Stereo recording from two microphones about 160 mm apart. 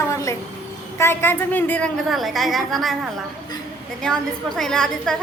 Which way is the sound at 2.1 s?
Centre (ahead or behind).